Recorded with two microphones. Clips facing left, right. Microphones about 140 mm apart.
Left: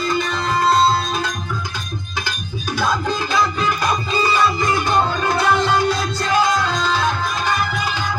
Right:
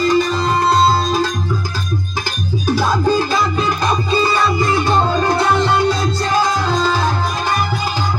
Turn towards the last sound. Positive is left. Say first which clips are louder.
# right 3 dB
turn(degrees=-40)  # may be behind; listen again after turning